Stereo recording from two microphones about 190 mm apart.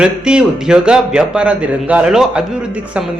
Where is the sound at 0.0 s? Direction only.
5° right (ahead or behind).